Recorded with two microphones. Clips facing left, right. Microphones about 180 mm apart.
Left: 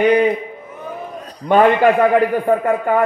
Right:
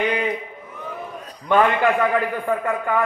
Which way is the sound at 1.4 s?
40° left (ahead or behind).